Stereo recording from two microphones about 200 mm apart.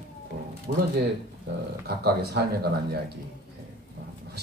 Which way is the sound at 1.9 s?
55° right (ahead or behind).